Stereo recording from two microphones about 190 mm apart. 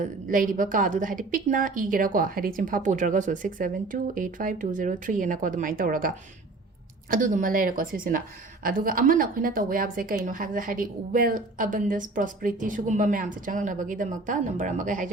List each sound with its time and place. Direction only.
0.0 s a woman's voice: 45° right (ahead or behind)